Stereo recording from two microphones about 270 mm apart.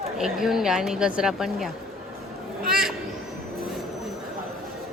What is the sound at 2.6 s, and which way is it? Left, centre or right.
Speech, right.